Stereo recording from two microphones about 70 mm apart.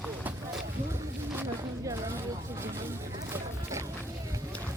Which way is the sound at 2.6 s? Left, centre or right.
Right.